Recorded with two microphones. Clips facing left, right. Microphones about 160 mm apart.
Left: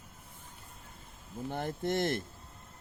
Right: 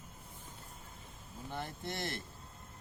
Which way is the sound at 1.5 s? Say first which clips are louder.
Left 8 dB; 50° left (ahead or behind).